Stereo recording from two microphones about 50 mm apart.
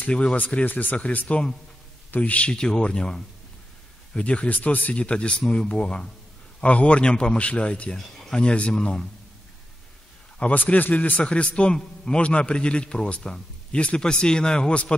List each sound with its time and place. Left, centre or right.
0.0 s a man's voice: left
4.2 s a man's voice: left
8.0 s speech: centre
8.4 s a man's voice: left
10.5 s a man's voice: left